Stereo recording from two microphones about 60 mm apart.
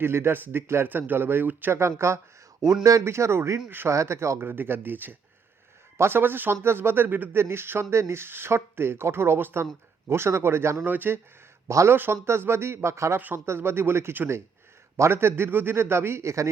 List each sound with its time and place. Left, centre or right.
0.0 s speech: right
2.0 s speech: right
10.8 s speech: right
13.1 s speech: right
13.4 s speech: right